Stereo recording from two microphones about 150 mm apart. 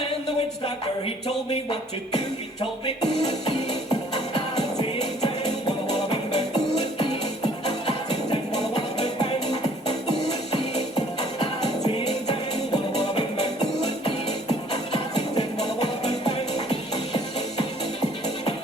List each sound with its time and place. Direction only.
0.0 s a sound: 40° left (ahead or behind)
8.3 s music: 30° left (ahead or behind)
11.9 s music: 35° left (ahead or behind)